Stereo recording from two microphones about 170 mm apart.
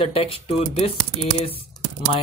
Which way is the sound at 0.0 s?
35° left (ahead or behind).